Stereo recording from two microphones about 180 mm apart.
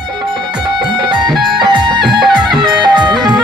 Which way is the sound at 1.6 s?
25° right (ahead or behind).